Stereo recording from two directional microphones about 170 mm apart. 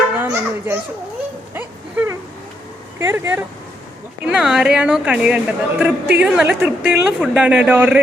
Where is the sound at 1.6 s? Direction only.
10° right (ahead or behind).